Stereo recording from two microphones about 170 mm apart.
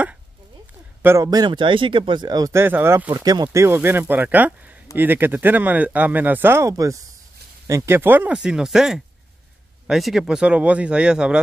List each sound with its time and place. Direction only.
1.0 s speech: 20° right (ahead or behind)
3.1 s a man's voice: 25° right (ahead or behind); by 11.3 s 5° right (ahead or behind)